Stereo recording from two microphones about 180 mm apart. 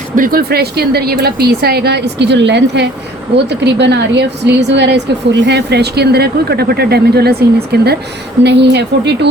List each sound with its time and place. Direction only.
0.2 s a woman's voice: 55° right (ahead or behind)